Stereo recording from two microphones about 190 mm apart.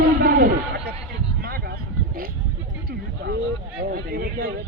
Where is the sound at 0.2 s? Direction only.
50° right (ahead or behind).